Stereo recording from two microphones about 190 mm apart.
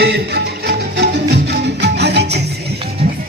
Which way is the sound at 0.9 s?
65° right (ahead or behind).